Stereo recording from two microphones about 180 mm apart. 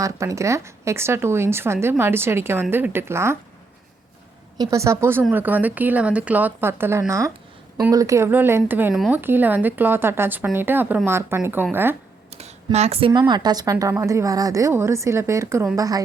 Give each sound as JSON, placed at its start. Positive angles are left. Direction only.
{"t": 0.0, "sound": "speech", "side_deg": -15}
{"t": 4.5, "sound": "speech", "side_deg": -20}
{"t": 12.3, "sound": "a sound", "side_deg": -35}
{"t": 12.7, "sound": "a woman's voice", "side_deg": -35}